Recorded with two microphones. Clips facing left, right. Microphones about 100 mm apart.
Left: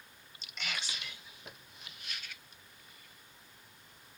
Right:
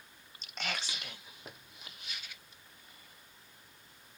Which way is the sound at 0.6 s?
45° right (ahead or behind).